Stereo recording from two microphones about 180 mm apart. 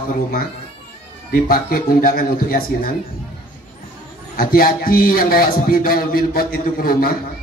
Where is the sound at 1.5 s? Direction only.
55° left (ahead or behind).